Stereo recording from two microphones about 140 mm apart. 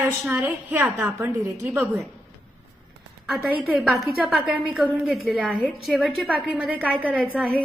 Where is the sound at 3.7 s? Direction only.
Centre (ahead or behind).